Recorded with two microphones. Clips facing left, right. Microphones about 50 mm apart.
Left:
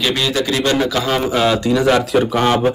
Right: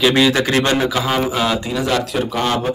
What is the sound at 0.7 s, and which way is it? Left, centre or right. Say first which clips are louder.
Speech: left 1 dB; centre.